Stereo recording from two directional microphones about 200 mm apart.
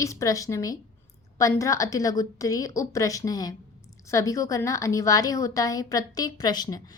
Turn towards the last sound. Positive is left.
turn(degrees=20)  # may be behind; listen again after turning